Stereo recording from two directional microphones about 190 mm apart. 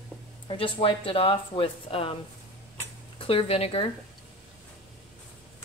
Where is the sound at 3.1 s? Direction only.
30° left (ahead or behind).